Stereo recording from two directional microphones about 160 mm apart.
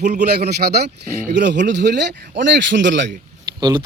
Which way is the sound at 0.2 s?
85° right.